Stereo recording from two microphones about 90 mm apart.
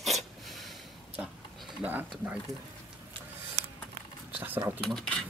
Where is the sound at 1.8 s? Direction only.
15° right (ahead or behind).